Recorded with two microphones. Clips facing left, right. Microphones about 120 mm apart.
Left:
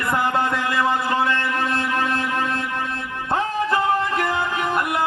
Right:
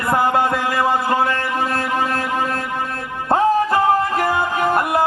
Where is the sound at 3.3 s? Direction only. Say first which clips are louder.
Right 6 dB; 45° right (ahead or behind).